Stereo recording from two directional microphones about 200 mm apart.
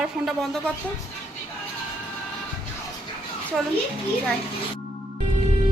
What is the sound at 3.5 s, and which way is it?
Speech, centre (ahead or behind).